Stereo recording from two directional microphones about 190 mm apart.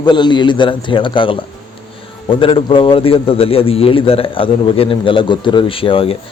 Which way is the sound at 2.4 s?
25° left (ahead or behind).